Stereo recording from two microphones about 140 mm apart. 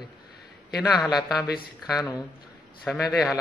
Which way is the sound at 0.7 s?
Centre (ahead or behind).